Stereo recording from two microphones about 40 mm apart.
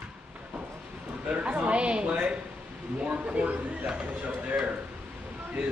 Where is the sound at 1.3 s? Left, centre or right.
Right.